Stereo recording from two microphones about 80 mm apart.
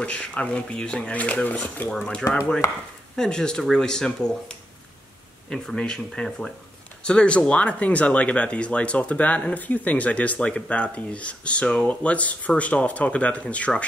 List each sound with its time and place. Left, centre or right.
0.0 s speech: centre